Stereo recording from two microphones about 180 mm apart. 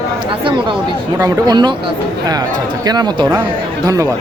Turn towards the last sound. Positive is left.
turn(degrees=-20)  # may be behind; listen again after turning